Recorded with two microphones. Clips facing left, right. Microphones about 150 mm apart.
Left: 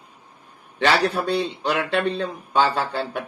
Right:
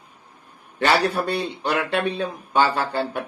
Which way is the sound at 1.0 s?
60° right (ahead or behind).